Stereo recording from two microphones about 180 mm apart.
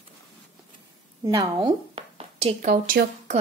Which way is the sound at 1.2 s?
25° right (ahead or behind).